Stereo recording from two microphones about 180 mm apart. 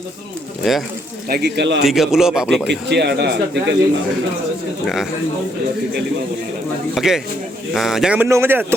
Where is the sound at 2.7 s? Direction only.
70° right (ahead or behind).